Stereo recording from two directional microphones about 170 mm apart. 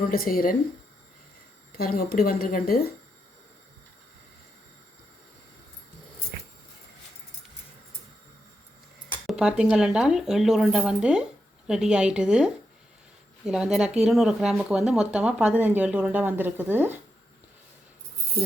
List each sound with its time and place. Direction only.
0.1 s speech: 60° left (ahead or behind)
1.7 s speech: 65° left (ahead or behind)
9.2 s speech: 5° right (ahead or behind)